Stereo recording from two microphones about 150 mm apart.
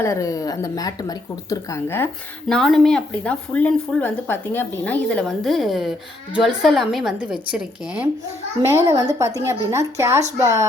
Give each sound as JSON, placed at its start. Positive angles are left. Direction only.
{"t": 0.0, "sound": "a woman's voice", "side_deg": 20}
{"t": 2.5, "sound": "speech", "side_deg": 0}
{"t": 8.6, "sound": "a child's voice", "side_deg": -20}